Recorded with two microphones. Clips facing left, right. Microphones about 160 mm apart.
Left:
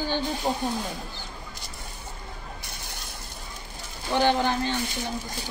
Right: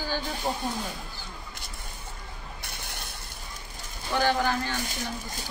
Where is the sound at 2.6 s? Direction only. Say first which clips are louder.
Even; 65° right (ahead or behind).